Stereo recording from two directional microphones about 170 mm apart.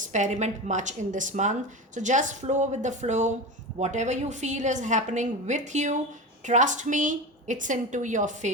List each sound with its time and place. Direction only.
0.0 s a woman's voice: 45° right (ahead or behind)